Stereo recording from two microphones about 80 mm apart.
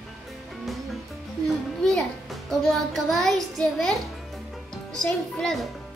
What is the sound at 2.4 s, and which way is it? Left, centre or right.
A child's voice, centre.